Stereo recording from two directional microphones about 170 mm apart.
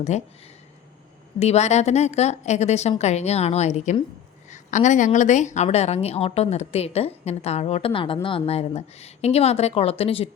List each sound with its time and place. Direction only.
0.1 s a woman's voice: 40° left (ahead or behind)
1.4 s a woman's voice: 40° left (ahead or behind)